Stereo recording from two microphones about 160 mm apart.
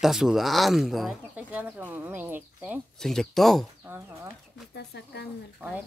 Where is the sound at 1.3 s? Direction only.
10° right (ahead or behind).